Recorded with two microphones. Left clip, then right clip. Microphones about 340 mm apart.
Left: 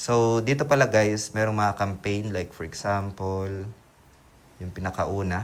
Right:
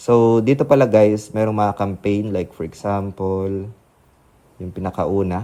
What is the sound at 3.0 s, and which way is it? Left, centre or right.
Speech, right.